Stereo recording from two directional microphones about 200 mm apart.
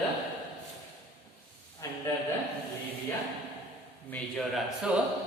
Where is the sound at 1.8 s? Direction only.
15° left (ahead or behind).